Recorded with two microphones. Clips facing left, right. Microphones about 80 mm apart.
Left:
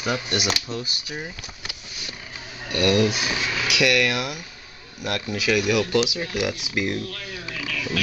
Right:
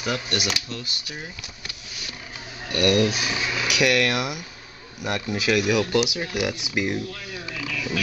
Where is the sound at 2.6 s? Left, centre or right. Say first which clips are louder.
Even; centre.